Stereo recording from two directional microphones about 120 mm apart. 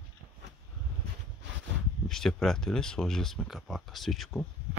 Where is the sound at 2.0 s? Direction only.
5° left (ahead or behind).